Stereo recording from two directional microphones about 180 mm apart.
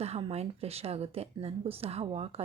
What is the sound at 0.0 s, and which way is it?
Speech, 35° right (ahead or behind).